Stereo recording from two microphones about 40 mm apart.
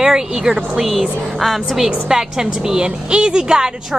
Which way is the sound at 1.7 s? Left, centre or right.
Centre.